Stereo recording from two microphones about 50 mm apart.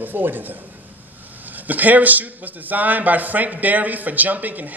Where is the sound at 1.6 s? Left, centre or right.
Right.